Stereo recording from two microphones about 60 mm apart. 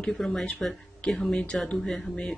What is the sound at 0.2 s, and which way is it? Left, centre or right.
Speech, centre.